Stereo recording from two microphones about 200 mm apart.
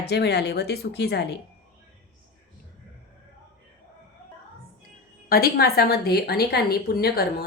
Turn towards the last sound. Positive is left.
turn(degrees=50)  # may be behind; listen again after turning